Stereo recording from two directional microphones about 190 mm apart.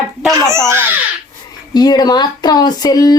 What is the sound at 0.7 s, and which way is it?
Speech, 10° right (ahead or behind).